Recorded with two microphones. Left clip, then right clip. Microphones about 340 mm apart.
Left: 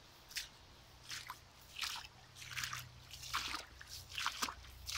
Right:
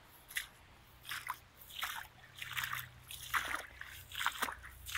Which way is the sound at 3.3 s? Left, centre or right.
Centre.